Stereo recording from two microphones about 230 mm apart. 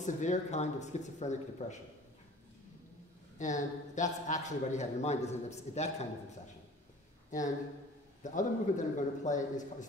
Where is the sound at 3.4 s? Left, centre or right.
Left.